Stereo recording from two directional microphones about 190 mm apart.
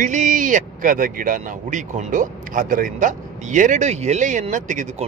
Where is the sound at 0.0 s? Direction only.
40° right (ahead or behind).